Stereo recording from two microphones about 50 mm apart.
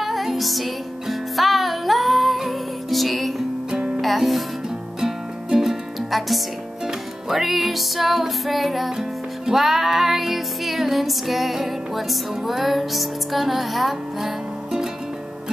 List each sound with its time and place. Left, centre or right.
0.0 s music: centre
4.0 s speech: centre
5.0 s music: centre